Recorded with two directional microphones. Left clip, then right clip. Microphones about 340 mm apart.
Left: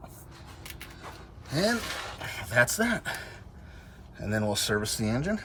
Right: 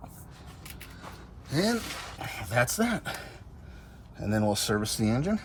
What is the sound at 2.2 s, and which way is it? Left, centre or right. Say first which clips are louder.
Speech: left 3 dB; centre.